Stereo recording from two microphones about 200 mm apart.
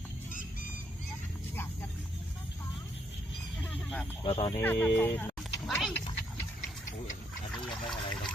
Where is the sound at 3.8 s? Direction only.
5° left (ahead or behind).